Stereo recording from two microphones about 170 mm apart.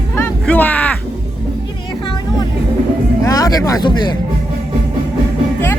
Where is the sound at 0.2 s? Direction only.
10° left (ahead or behind).